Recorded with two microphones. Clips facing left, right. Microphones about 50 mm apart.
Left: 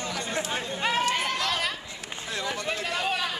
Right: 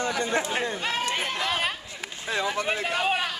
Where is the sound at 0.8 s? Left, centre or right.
Centre.